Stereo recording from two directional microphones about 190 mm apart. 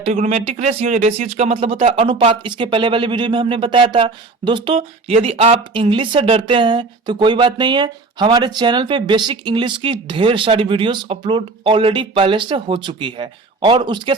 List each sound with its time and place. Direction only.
0.0 s speech: 35° right (ahead or behind)